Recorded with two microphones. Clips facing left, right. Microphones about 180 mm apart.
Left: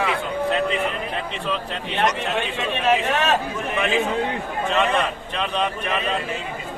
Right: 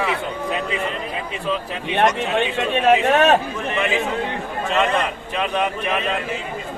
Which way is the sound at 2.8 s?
55° right (ahead or behind).